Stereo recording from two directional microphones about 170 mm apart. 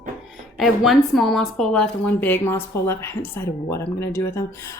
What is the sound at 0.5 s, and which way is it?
A woman's voice, centre (ahead or behind).